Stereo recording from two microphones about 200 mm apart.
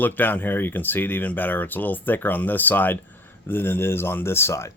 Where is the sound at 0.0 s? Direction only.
10° left (ahead or behind).